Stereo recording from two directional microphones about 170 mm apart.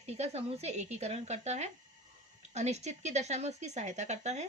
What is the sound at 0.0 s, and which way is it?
A woman's voice, 40° right (ahead or behind).